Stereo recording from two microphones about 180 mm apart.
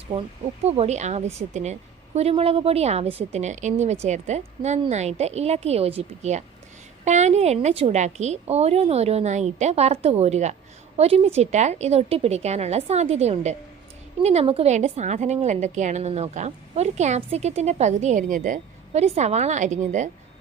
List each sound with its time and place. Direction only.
0.6 s a woman's voice: 35° right (ahead or behind)